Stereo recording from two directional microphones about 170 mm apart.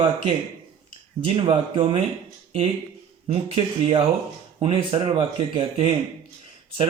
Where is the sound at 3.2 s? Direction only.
35° right (ahead or behind).